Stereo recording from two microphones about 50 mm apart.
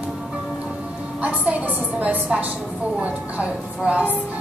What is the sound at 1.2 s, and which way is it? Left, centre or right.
A woman's voice, right.